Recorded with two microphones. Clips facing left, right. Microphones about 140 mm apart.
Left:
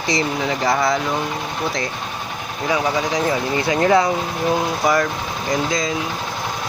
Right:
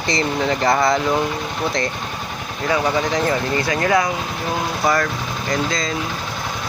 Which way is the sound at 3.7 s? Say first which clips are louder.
Left 4 dB; 25° left (ahead or behind).